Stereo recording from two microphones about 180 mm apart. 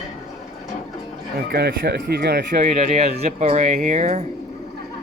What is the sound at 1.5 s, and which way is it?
Speech, 60° right (ahead or behind).